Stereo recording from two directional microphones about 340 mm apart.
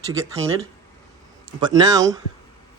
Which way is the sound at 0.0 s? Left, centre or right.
Centre.